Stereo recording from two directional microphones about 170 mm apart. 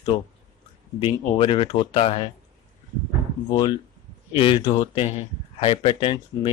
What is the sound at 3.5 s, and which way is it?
Speech, 25° left (ahead or behind).